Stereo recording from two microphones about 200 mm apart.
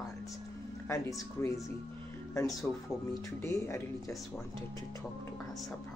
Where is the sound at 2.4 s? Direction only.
Centre (ahead or behind).